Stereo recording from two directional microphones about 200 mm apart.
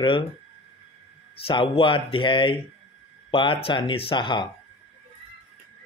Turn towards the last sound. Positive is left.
turn(degrees=25)  # may be behind; listen again after turning